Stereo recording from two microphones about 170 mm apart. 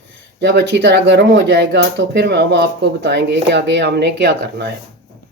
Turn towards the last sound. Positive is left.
turn(degrees=-80)